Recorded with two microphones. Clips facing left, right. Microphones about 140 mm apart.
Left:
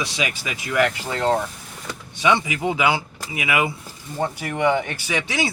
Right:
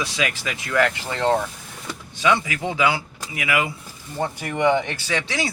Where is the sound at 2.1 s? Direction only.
20° left (ahead or behind).